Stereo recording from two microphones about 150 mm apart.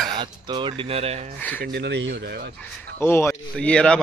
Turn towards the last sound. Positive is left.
turn(degrees=5)  # may be behind; listen again after turning